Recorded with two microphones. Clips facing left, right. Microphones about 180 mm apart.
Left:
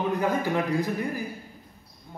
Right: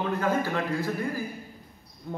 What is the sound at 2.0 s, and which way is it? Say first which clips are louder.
Speech: right 9 dB; 70° right (ahead or behind).